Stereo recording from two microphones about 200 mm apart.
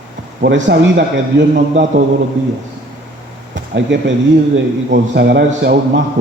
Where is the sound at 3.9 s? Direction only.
65° right (ahead or behind).